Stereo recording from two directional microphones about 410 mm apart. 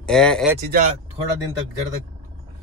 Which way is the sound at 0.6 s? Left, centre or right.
Centre.